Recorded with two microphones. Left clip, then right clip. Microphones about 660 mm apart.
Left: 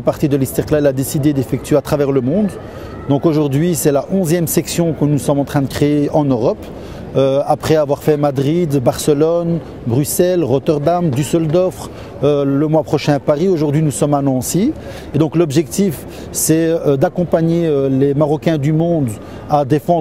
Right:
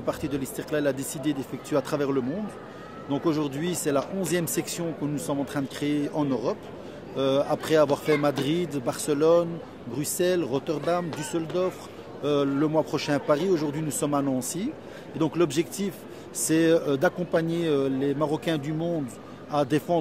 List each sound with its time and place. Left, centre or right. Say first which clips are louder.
0.0 s a man's voice: left 14 dB; left